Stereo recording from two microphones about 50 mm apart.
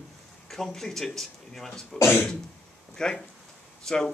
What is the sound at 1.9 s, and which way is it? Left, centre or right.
Speech, left.